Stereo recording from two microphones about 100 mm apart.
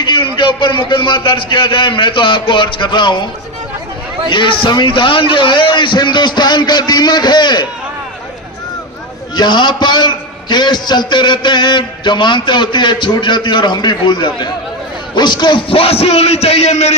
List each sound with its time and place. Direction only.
0.3 s a man's voice: 55° left (ahead or behind)
4.3 s a man's voice: 55° left (ahead or behind)
9.3 s a man's voice: 50° left (ahead or behind)
15.7 s a man's voice: 75° left (ahead or behind); by 16.9 s 90° left